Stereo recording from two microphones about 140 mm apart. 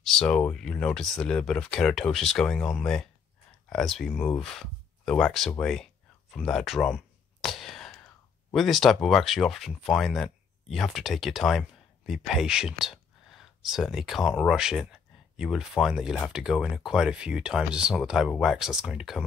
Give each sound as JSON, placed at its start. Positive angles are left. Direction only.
{"t": 0.0, "sound": "speech", "side_deg": 5}
{"t": 6.3, "sound": "whispering", "side_deg": 0}
{"t": 8.5, "sound": "speech", "side_deg": 0}